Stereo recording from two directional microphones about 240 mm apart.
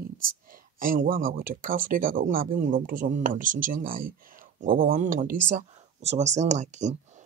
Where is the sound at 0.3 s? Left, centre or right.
Right.